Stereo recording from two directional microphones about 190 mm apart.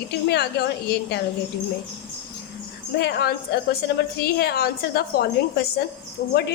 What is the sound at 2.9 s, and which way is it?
A woman's voice, 55° left (ahead or behind).